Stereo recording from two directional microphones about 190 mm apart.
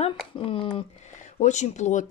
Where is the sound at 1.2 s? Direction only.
40° left (ahead or behind).